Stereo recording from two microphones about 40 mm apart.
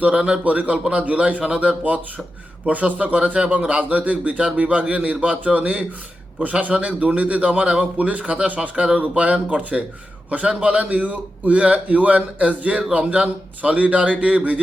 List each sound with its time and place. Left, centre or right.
0.0 s a man's voice: right
0.4 s a man's voice: right